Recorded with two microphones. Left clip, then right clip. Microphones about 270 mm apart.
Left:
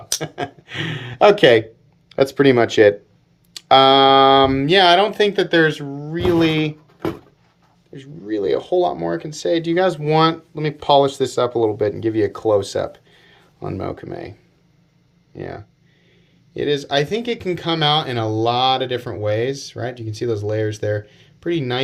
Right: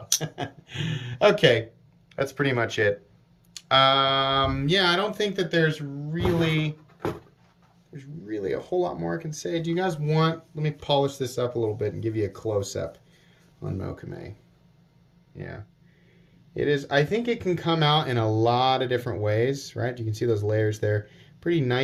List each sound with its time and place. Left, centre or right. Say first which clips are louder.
0.2 s speech: left 7 dB; centre
7.9 s speech: left 9 dB; centre
15.4 s speech: left 9 dB; centre